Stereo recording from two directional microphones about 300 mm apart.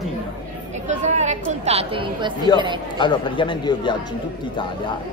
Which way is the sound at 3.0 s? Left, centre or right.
Centre.